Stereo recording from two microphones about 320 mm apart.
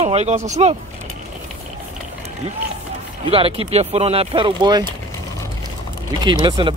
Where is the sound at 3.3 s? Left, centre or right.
Centre.